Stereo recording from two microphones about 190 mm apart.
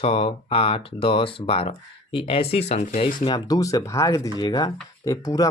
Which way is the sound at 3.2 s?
20° left (ahead or behind).